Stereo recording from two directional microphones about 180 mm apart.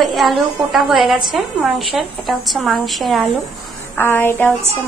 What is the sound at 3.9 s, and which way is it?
Speech, 10° left (ahead or behind).